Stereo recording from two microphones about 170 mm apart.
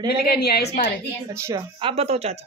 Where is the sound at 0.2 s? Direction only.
65° left (ahead or behind).